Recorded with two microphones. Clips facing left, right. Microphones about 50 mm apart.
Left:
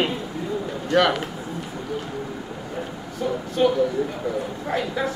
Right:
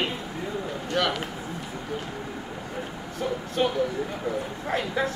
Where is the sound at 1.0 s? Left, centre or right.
Left.